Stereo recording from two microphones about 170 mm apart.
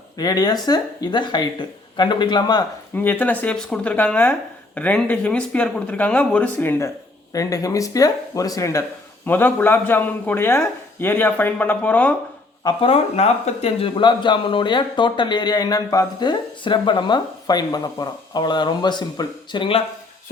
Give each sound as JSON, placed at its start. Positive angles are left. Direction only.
{"t": 0.2, "sound": "speech", "side_deg": 25}
{"t": 2.9, "sound": "speech", "side_deg": 10}
{"t": 12.6, "sound": "speech", "side_deg": 35}